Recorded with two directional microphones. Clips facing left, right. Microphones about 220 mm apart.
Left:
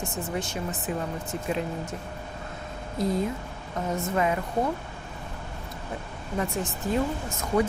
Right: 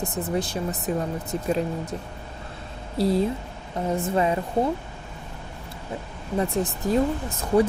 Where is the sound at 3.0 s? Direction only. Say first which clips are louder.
Right 5 dB; 30° right (ahead or behind).